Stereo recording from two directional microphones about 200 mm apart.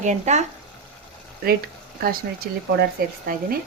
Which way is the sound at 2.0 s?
45° right (ahead or behind).